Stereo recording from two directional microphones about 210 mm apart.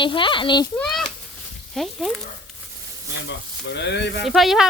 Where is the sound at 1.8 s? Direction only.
Centre (ahead or behind).